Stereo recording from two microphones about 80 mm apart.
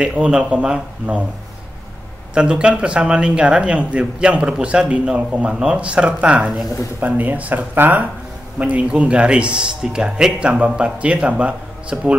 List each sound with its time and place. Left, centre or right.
0.0 s speech: centre
2.3 s speech: centre